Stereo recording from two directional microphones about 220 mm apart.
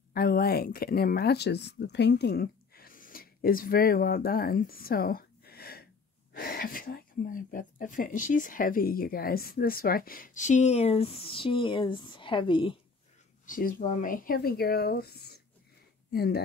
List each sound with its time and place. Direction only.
0.1 s speech: 45° left (ahead or behind); by 12.7 s 20° left (ahead or behind)
13.5 s speech: 40° left (ahead or behind)